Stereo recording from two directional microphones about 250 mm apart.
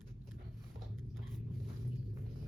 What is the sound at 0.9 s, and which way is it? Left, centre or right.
Biting, centre.